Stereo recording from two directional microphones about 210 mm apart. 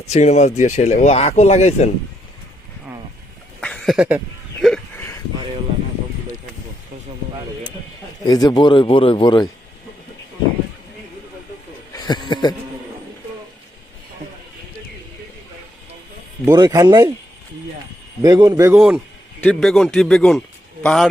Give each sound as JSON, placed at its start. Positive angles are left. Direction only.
{"t": 0.0, "sound": "speech", "side_deg": 30}
{"t": 3.6, "sound": "a sound", "side_deg": 5}
{"t": 8.2, "sound": "a man's voice", "side_deg": 20}
{"t": 11.9, "sound": "a man's voice", "side_deg": 20}
{"t": 16.5, "sound": "speech", "side_deg": -20}
{"t": 18.2, "sound": "a man's voice", "side_deg": -15}
{"t": 18.7, "sound": "speech", "side_deg": -5}